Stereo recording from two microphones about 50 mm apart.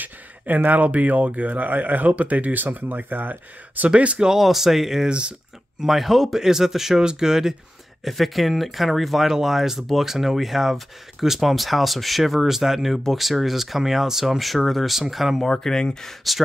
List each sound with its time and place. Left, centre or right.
0.7 s speech: right
3.9 s speech: right
4.3 s speech: centre
8.0 s speech: centre
15.4 s speech: centre